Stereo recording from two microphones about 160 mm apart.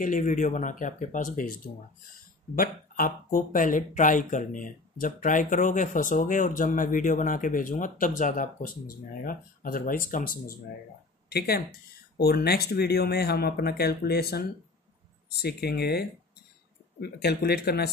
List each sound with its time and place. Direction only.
0.0 s speech: 55° left (ahead or behind)
2.5 s speech: 60° left (ahead or behind)
11.2 s speech: 80° left